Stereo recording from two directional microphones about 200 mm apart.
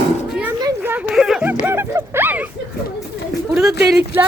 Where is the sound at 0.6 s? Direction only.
20° right (ahead or behind).